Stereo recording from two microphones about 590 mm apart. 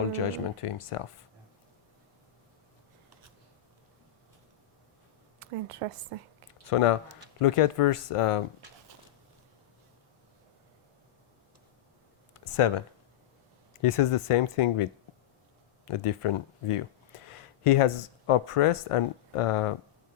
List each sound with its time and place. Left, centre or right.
0.2 s speech: left
5.4 s a woman's voice: right
6.7 s speech: left
12.5 s speech: left
13.8 s speech: left
15.9 s speech: left